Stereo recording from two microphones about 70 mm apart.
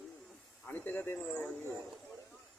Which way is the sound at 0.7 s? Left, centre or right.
Left.